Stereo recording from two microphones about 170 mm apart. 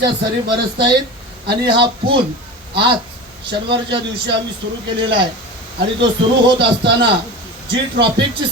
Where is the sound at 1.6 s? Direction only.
30° right (ahead or behind).